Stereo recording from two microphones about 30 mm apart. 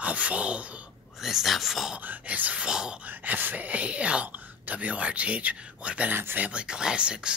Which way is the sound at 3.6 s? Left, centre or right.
Right.